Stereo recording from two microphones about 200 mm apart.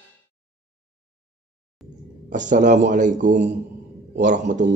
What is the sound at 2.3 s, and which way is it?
A man's voice, 40° right (ahead or behind).